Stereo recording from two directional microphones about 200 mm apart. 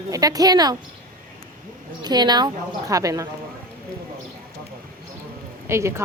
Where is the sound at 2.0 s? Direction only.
20° right (ahead or behind).